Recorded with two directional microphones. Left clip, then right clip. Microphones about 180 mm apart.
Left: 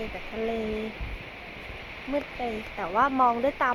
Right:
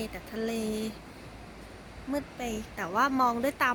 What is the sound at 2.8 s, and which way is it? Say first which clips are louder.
Speech: left 3 dB; 10° right (ahead or behind).